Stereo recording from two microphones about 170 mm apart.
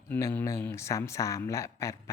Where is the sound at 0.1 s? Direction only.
15° left (ahead or behind).